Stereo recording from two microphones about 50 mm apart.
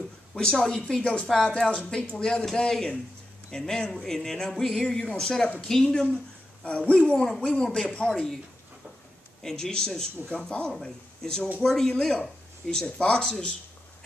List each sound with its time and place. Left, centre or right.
0.3 s a woman's voice: centre
0.8 s speech: centre
6.6 s speech: left
7.2 s speech: centre
9.4 s speech: centre
12.8 s speech: left